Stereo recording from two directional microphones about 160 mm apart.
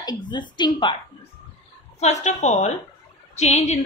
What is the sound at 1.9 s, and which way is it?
A woman's voice, 45° left (ahead or behind).